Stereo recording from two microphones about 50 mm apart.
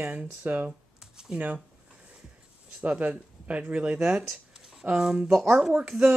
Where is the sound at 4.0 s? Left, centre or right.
Centre.